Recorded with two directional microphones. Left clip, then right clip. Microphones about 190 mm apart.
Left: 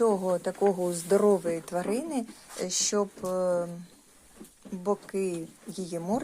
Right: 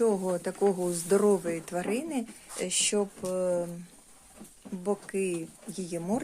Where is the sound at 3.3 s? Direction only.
10° right (ahead or behind).